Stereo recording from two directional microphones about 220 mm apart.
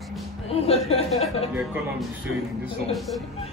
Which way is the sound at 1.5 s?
5° right (ahead or behind).